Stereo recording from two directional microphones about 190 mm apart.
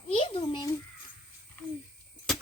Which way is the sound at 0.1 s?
30° left (ahead or behind).